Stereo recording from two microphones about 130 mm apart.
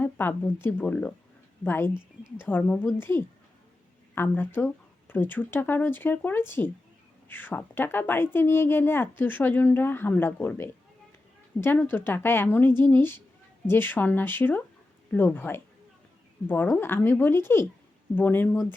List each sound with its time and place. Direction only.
0.0 s a woman's voice: 15° left (ahead or behind)